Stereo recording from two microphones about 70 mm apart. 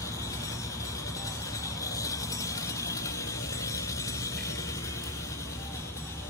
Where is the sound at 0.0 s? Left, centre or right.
Left.